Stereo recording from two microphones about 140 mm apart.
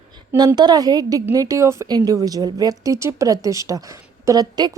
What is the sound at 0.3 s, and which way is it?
A woman's voice, 30° right (ahead or behind).